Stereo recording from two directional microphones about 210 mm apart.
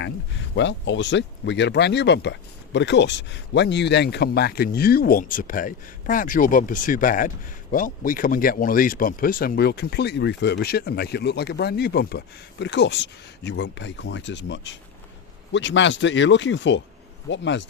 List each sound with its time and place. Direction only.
0.5 s speech: 60° left (ahead or behind)